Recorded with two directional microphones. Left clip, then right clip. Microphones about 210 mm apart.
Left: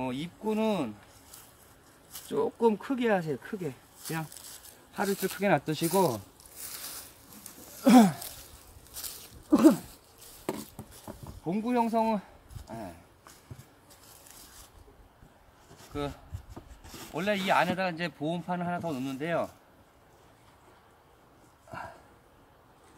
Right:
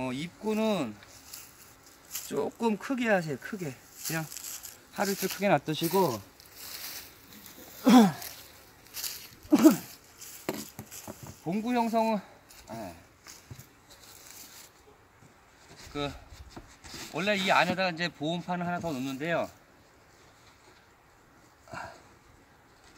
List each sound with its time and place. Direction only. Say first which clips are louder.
0.0 s speech: even; 15° right (ahead or behind)
2.1 s speech: left 2 dB; 20° right (ahead or behind)
5.0 s speech: even; 5° right (ahead or behind)
5.7 s speech: even; 15° left (ahead or behind)
7.8 s a sound: even; 30° left (ahead or behind)
8.9 s walk: right 5 dB; centre (ahead or behind)
10.4 s a sound: even; 10° right (ahead or behind)
15.9 s rub: right 1 dB; centre (ahead or behind)
21.6 s dog: even; 5° right (ahead or behind)